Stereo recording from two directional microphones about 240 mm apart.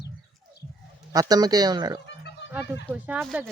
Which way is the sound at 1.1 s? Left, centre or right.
Centre.